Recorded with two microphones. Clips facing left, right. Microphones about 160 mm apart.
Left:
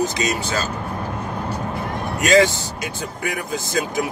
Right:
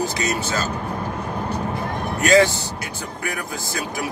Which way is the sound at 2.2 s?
15° left (ahead or behind).